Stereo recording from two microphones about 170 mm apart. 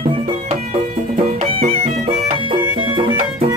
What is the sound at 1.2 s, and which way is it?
Music, 35° right (ahead or behind).